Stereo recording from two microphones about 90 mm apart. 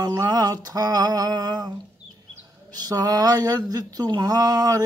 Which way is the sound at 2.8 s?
45° right (ahead or behind).